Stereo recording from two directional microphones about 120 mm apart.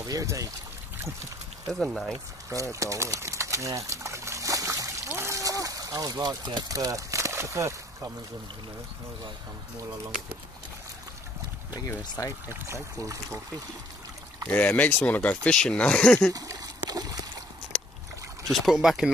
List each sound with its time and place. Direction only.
0.0 s speech: 30° right (ahead or behind)
1.7 s speech: centre (ahead or behind)
2.5 s a sound: 25° right (ahead or behind)
12.0 s speech: 30° left (ahead or behind)
12.4 s speech: 25° right (ahead or behind)
14.5 s speech: 15° left (ahead or behind)
16.3 s a sound: 30° right (ahead or behind)
18.5 s speech: centre (ahead or behind)